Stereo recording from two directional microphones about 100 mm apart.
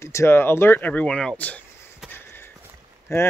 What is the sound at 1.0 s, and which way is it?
Speech, 5° left (ahead or behind).